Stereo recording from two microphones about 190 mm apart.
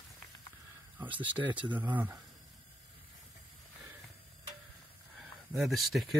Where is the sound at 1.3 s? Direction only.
10° right (ahead or behind).